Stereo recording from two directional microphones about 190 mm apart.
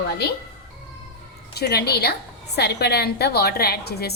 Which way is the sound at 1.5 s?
55° left (ahead or behind).